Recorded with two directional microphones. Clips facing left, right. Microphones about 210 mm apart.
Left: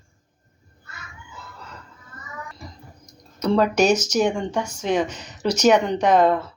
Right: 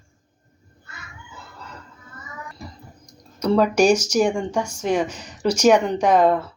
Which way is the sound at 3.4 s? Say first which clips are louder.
Right 2 dB; 10° right (ahead or behind).